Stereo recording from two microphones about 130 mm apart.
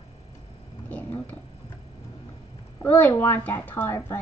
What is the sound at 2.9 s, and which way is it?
Speech, 15° left (ahead or behind).